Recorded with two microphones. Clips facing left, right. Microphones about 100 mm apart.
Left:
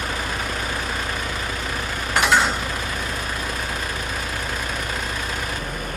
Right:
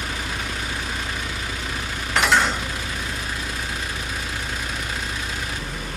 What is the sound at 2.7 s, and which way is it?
Vehicle, 50° left (ahead or behind).